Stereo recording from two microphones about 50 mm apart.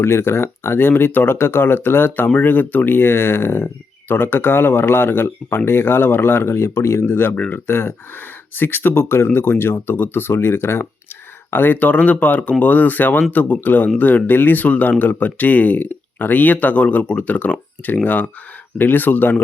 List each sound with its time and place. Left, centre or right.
0.0 s speech: left
7.0 s speech: left
11.5 s speech: left